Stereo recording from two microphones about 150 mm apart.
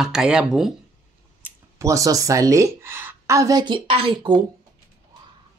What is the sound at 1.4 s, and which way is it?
Speech, 20° right (ahead or behind).